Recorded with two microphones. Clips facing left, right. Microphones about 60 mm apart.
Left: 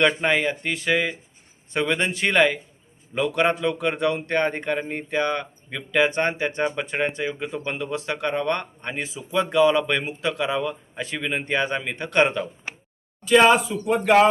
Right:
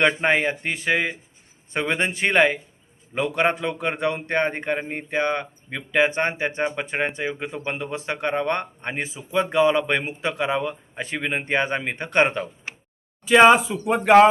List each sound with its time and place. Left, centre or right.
0.0 s speech: right
12.7 s a sound: centre
13.2 s speech: right